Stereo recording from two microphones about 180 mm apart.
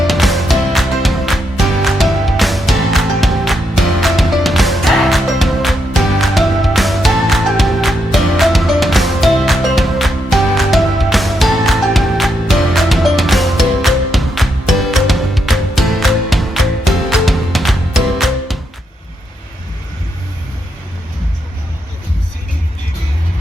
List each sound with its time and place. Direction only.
0.1 s music: centre (ahead or behind)